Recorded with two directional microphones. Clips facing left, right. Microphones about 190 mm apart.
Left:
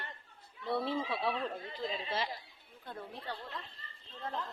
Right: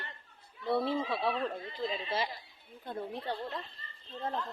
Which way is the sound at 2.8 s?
20° right (ahead or behind).